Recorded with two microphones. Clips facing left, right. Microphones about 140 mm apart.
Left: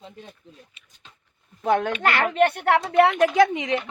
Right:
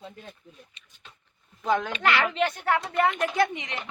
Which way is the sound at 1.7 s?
60° left (ahead or behind).